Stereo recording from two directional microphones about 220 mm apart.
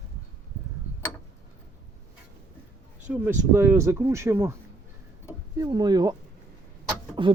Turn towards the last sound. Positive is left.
turn(degrees=-20)  # may be behind; listen again after turning